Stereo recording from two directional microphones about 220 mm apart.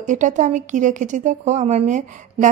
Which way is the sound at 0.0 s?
35° right (ahead or behind).